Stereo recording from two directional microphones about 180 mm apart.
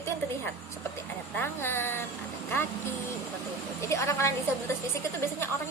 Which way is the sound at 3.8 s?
15° left (ahead or behind).